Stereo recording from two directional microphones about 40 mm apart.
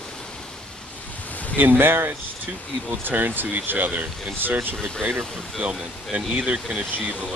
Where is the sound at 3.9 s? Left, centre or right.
Right.